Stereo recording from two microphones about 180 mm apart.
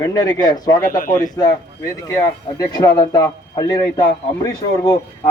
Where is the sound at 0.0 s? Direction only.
20° left (ahead or behind).